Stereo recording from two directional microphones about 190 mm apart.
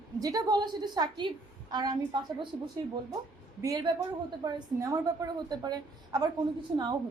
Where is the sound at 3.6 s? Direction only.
20° right (ahead or behind).